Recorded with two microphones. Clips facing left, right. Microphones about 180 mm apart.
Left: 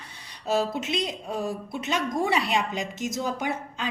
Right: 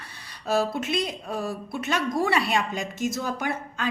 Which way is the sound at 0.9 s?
20° left (ahead or behind).